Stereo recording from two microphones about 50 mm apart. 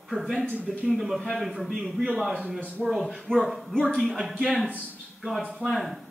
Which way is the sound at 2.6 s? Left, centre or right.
Right.